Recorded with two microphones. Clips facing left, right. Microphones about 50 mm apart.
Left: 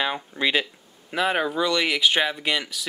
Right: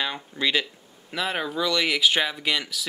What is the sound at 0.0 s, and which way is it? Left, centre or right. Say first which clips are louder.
Speech: left 2 dB; centre.